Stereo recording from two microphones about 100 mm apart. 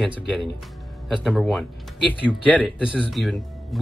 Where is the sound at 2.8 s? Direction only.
10° right (ahead or behind).